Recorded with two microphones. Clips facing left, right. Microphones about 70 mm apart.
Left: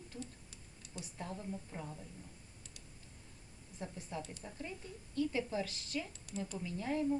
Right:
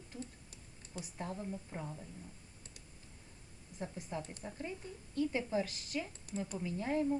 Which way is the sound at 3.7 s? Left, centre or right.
Centre.